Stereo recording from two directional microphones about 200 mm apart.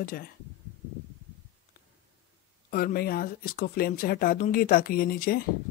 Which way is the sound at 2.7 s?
45° left (ahead or behind).